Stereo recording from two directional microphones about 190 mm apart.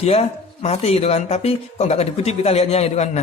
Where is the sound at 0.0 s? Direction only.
30° left (ahead or behind).